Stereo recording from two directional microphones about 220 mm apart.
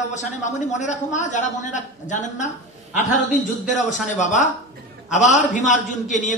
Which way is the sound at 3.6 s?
35° left (ahead or behind).